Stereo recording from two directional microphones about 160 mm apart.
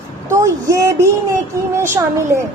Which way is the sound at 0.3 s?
20° right (ahead or behind).